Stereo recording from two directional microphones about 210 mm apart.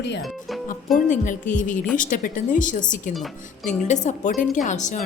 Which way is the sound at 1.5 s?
35° left (ahead or behind).